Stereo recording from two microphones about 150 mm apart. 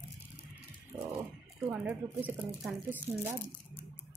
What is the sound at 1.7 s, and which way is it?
Speech, 10° right (ahead or behind).